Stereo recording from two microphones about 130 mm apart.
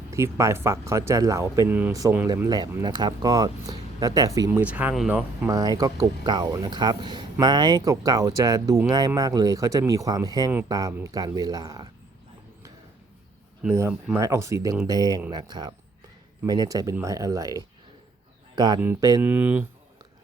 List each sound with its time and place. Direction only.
0.1 s speech: 25° right (ahead or behind)
4.6 s speech: 10° right (ahead or behind)
5.5 s speech: 30° right (ahead or behind)
13.7 s speech: 20° right (ahead or behind)
19.2 s speech: 15° right (ahead or behind)